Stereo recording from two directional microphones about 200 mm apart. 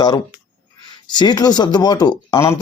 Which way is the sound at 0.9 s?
20° left (ahead or behind).